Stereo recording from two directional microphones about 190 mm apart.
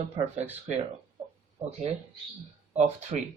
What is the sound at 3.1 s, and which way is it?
Speech, 35° right (ahead or behind).